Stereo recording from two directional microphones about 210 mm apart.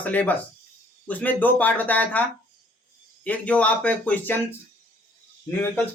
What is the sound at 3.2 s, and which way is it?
Speech, 5° left (ahead or behind).